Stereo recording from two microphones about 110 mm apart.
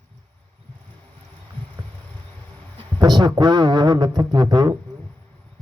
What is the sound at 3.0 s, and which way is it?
A man's voice, 40° right (ahead or behind).